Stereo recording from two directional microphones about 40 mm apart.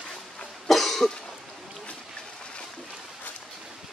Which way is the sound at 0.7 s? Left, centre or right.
Centre.